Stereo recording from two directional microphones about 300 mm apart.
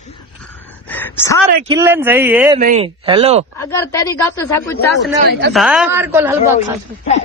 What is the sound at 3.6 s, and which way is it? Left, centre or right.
Speech, centre.